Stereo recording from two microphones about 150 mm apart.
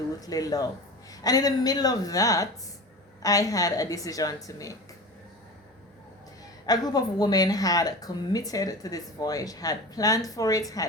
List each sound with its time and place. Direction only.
0.2 s speech: 25° left (ahead or behind)
6.7 s speech: 25° left (ahead or behind)